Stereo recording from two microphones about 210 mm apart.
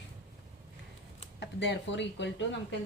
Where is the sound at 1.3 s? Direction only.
55° left (ahead or behind).